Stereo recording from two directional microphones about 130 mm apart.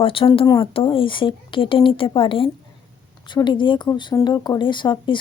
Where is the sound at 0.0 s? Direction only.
45° left (ahead or behind).